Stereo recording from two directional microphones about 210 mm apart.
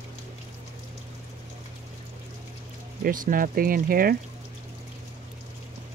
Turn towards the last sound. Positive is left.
turn(degrees=-45)  # may be behind; listen again after turning